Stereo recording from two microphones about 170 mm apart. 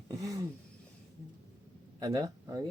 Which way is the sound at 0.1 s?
20° right (ahead or behind).